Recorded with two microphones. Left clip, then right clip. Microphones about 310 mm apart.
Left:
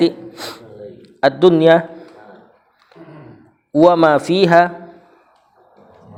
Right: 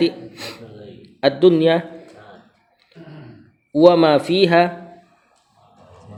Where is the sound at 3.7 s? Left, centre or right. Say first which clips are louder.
Left 1 dB; centre.